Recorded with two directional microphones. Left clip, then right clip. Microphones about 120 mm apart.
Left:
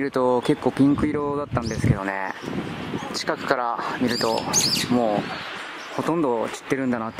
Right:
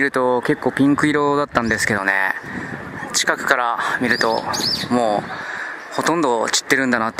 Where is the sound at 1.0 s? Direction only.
30° right (ahead or behind).